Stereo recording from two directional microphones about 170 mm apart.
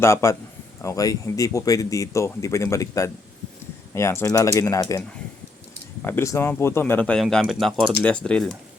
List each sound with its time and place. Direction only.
0.0 s speech: 15° left (ahead or behind)